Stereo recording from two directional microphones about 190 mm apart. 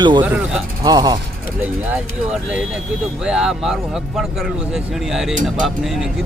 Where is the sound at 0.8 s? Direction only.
20° right (ahead or behind).